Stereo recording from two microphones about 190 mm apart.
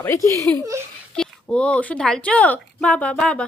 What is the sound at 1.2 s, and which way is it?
Speech, 5° left (ahead or behind).